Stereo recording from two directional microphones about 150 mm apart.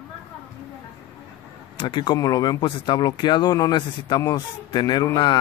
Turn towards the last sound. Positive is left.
turn(degrees=30)  # may be behind; listen again after turning